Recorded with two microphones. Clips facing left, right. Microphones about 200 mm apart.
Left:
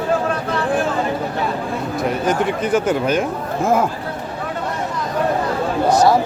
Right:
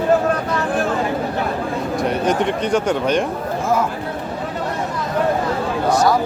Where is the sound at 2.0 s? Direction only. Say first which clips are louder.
Even; centre (ahead or behind).